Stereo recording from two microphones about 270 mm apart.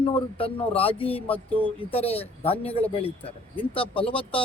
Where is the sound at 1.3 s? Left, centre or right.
Centre.